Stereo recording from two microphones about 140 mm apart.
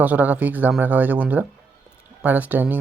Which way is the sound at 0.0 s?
10° right (ahead or behind).